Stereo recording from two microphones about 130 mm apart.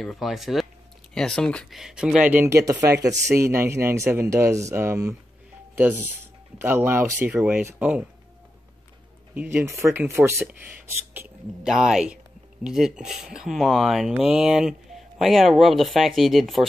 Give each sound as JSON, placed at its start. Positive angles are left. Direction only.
{"t": 0.0, "sound": "speech", "side_deg": 0}
{"t": 6.6, "sound": "speech", "side_deg": -15}
{"t": 9.3, "sound": "speech", "side_deg": -15}
{"t": 11.6, "sound": "speech", "side_deg": -5}